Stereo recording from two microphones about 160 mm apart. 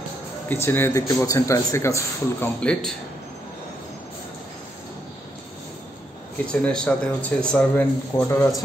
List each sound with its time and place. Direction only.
0.5 s a man's voice: 15° left (ahead or behind)
2.6 s speech: 5° left (ahead or behind)
6.4 s speech: 5° left (ahead or behind)